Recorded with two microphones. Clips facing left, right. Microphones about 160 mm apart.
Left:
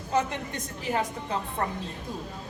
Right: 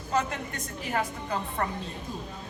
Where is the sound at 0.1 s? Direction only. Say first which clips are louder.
Left 1 dB; 20° left (ahead or behind).